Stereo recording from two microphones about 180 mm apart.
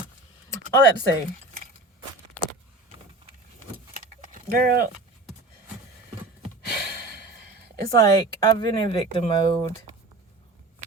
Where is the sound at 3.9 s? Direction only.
50° right (ahead or behind).